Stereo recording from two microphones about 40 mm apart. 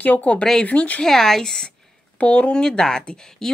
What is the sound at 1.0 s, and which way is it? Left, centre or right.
Speech, centre.